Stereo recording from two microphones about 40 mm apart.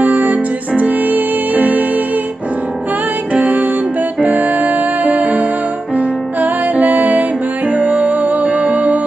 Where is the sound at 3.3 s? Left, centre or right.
Right.